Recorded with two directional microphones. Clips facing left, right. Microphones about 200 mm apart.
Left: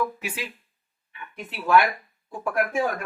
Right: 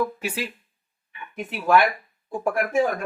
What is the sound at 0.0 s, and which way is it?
Speech, 35° right (ahead or behind).